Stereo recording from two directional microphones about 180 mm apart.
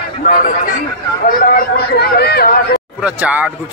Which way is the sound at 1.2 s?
50° left (ahead or behind).